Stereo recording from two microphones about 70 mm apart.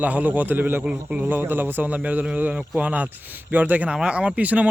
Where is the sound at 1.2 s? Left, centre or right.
Right.